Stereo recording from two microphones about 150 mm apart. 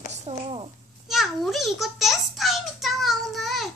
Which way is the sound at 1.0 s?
Centre (ahead or behind).